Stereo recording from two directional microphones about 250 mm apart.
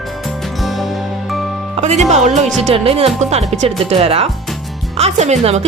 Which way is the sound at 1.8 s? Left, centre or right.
Right.